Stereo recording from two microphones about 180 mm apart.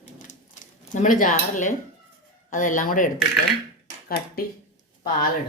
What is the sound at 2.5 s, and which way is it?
Speech, 45° left (ahead or behind).